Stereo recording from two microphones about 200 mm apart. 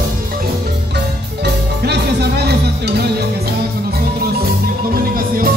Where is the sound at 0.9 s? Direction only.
55° right (ahead or behind).